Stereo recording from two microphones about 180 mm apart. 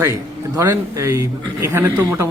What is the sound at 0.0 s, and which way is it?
A man's voice, 15° right (ahead or behind).